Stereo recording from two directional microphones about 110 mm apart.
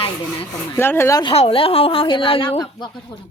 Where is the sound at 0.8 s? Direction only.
20° left (ahead or behind).